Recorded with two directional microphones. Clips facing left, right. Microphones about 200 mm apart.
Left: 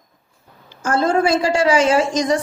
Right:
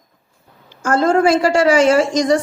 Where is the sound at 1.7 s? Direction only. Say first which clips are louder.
Right 2 dB; 60° right (ahead or behind).